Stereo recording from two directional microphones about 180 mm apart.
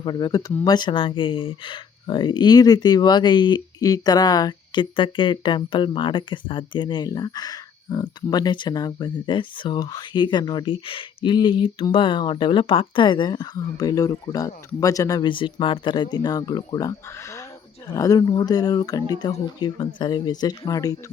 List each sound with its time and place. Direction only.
0.0 s speech: 25° left (ahead or behind)